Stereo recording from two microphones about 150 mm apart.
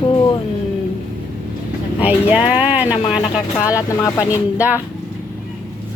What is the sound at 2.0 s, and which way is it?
Speech, 10° right (ahead or behind).